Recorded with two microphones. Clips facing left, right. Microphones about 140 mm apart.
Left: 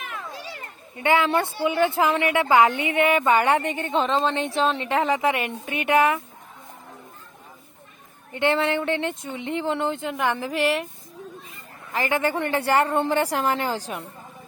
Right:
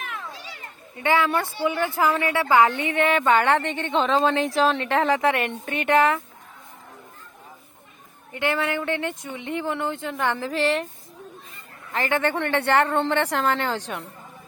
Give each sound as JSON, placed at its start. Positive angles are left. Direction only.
{"t": 1.0, "sound": "a woman's voice", "side_deg": 20}
{"t": 8.3, "sound": "speech", "side_deg": 25}
{"t": 11.9, "sound": "a woman's voice", "side_deg": 10}